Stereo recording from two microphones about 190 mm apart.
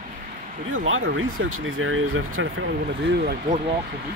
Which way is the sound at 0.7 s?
90° right.